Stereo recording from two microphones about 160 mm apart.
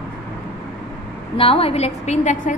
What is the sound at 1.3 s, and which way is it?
A woman's voice, 35° left (ahead or behind).